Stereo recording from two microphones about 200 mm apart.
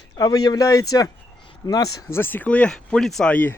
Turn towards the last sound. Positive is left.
turn(degrees=10)  # may be behind; listen again after turning